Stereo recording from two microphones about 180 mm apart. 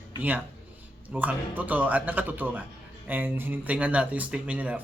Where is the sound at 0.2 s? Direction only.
10° right (ahead or behind).